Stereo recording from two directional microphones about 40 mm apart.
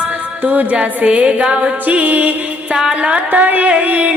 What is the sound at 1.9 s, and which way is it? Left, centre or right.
Music, right.